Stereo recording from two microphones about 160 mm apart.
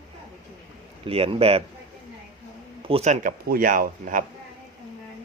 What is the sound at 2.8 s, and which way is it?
Speech, 35° right (ahead or behind).